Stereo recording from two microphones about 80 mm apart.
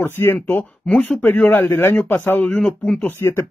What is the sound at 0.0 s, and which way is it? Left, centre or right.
Speech, left.